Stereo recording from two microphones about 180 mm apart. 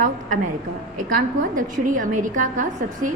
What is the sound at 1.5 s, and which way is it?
A woman's voice, 50° right (ahead or behind).